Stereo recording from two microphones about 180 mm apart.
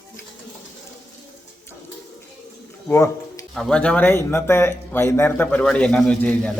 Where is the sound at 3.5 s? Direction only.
5° left (ahead or behind).